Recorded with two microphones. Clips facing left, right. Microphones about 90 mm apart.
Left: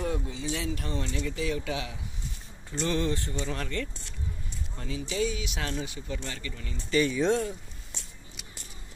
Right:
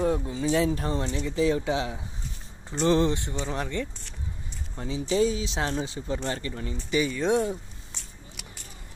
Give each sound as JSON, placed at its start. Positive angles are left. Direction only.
{"t": 0.0, "sound": "a sound", "side_deg": -35}
{"t": 0.4, "sound": "speech", "side_deg": -40}
{"t": 6.7, "sound": "speech", "side_deg": -15}